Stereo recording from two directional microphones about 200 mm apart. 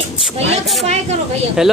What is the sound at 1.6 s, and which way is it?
Speech, 5° right (ahead or behind).